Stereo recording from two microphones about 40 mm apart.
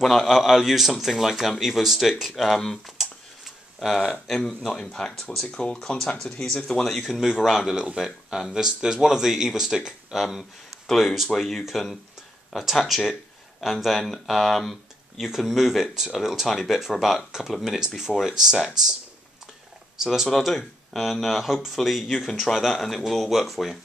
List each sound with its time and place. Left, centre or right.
0.0 s a man's voice: centre
4.4 s speech: centre
6.4 s speech: centre
7.4 s a man's voice: centre
15.2 s a man's voice: centre
20.0 s speech: centre
20.2 s a man's voice: centre